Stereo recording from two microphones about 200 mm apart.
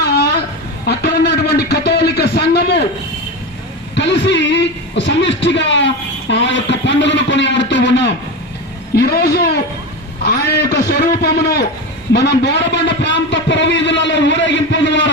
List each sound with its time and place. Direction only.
0.0 s a sound: 55° left (ahead or behind)
3.9 s speech: 60° left (ahead or behind)
9.0 s a man's voice: 50° left (ahead or behind)